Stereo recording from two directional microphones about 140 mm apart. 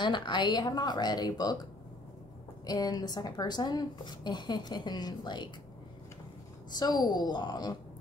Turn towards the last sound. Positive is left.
turn(degrees=30)  # may be behind; listen again after turning